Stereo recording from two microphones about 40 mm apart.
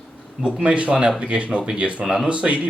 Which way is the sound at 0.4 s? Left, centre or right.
Right.